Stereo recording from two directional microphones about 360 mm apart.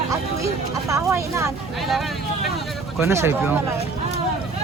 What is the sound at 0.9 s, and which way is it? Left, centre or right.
Speech, centre.